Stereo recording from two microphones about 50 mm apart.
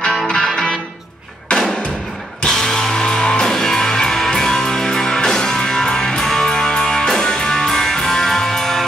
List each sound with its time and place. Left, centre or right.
0.5 s music: centre